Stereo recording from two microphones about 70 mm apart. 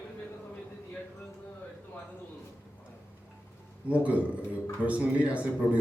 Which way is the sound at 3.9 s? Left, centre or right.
Centre.